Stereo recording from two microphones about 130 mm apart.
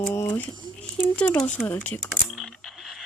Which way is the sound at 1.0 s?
10° left (ahead or behind).